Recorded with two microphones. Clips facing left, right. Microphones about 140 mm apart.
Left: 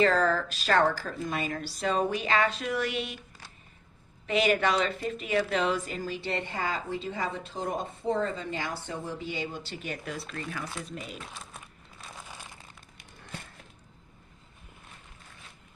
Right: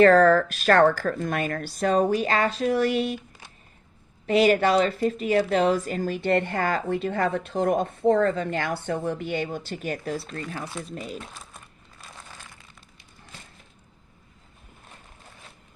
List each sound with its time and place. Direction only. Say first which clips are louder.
0.0 s a woman's voice: right 9 dB; 55° right (ahead or behind); by 3.2 s 40° right (ahead or behind)
4.3 s a woman's voice: right 6 dB; 40° right (ahead or behind)
11.3 s crumpling: even; centre (ahead or behind)